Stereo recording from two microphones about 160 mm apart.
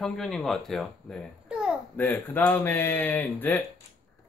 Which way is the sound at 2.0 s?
10° left (ahead or behind).